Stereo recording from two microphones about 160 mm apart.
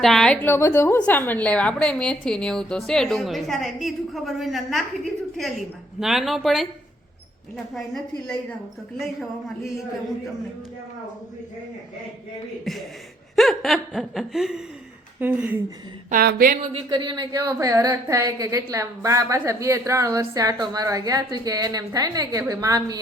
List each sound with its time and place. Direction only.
0.0 s a woman's voice: 5° left (ahead or behind)
12.7 s a woman's voice: centre (ahead or behind)
16.0 s a woman's voice: 65° right (ahead or behind)
16.7 s a woman's voice: 30° right (ahead or behind)